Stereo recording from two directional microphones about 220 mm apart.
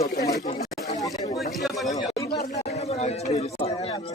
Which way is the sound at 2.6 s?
30° left (ahead or behind).